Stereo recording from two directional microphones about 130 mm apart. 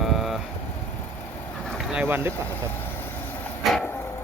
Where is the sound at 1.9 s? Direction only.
15° right (ahead or behind).